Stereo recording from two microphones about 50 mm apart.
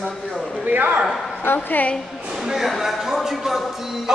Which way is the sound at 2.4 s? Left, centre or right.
Centre.